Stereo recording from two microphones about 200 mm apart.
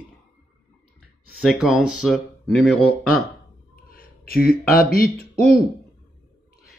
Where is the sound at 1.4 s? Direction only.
5° right (ahead or behind).